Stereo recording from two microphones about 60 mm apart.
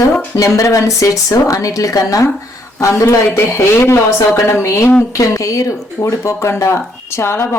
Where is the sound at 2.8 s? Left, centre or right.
Left.